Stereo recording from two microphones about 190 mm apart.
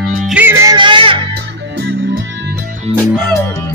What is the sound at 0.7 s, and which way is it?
Music, 25° right (ahead or behind).